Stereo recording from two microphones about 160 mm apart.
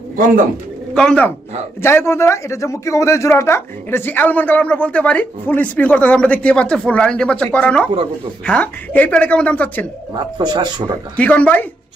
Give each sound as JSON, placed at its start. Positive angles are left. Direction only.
{"t": 0.9, "sound": "a man's voice", "side_deg": 5}
{"t": 10.3, "sound": "speech", "side_deg": -30}
{"t": 11.2, "sound": "a man's voice", "side_deg": 10}